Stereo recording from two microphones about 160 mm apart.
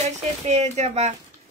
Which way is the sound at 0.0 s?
45° right (ahead or behind).